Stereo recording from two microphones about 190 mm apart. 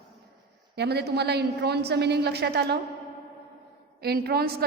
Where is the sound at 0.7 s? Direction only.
60° right (ahead or behind).